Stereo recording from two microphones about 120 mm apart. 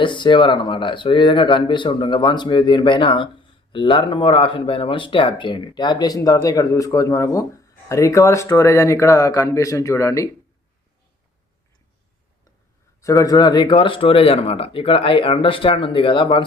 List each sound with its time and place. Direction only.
0.0 s speech: 40° left (ahead or behind); by 10.2 s 25° left (ahead or behind)
13.0 s speech: 25° left (ahead or behind); by 16.4 s 45° left (ahead or behind)